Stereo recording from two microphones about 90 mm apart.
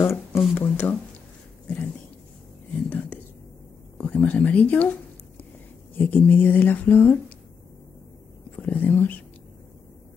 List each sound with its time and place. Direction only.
0.0 s a sound: 30° left (ahead or behind)
0.6 s speech: 25° left (ahead or behind)
2.7 s speech: 20° left (ahead or behind)
5.9 s speech: 25° left (ahead or behind)
8.5 s speech: 20° left (ahead or behind)